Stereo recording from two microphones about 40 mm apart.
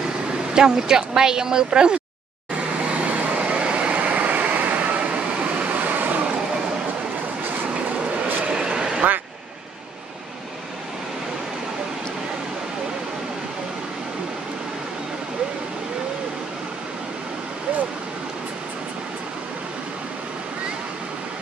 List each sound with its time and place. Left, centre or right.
0.5 s speech: centre
2.8 s vehicle: right
8.5 s a sound: right